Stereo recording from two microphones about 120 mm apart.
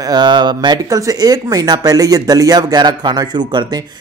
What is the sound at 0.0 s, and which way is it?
Speech, 35° right (ahead or behind).